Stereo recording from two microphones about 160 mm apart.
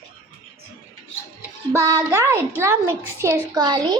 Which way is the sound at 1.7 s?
20° right (ahead or behind).